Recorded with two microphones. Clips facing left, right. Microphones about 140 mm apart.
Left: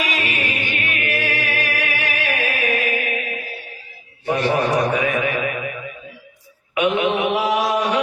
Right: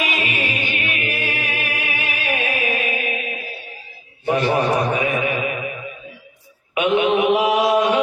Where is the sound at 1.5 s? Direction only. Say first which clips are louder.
Left 3 dB; 75° left (ahead or behind).